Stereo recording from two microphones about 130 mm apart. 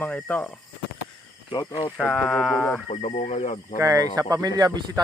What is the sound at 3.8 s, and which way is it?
Speech, 25° right (ahead or behind).